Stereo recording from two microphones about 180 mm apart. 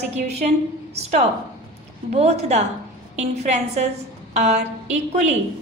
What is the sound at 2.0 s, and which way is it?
Speech, 35° right (ahead or behind).